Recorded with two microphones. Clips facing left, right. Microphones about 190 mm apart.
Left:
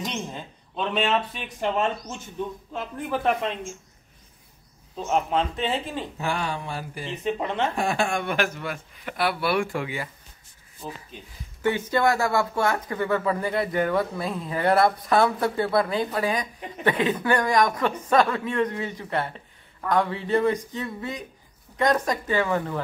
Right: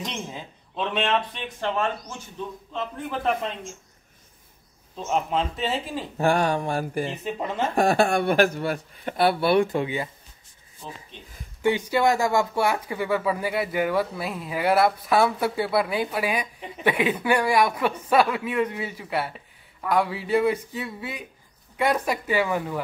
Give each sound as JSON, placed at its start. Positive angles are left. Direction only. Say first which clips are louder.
{"t": 0.0, "sound": "speech", "louder": "left 2 dB", "side_deg": 0}
{"t": 1.6, "sound": "speech", "louder": "left 2 dB", "side_deg": 15}
{"t": 2.7, "sound": "speech", "louder": "right 1 dB", "side_deg": 5}
{"t": 4.9, "sound": "speech", "louder": "left 1 dB", "side_deg": 0}
{"t": 6.1, "sound": "speech", "louder": "right 9 dB", "side_deg": -50}
{"t": 7.2, "sound": "speech", "louder": "left 2 dB", "side_deg": -5}
{"t": 7.7, "sound": "a man's voice", "louder": "right 5 dB", "side_deg": -45}
{"t": 11.1, "sound": "speech", "louder": "left 2 dB", "side_deg": 5}
{"t": 11.6, "sound": "speech", "louder": "right 1 dB", "side_deg": -15}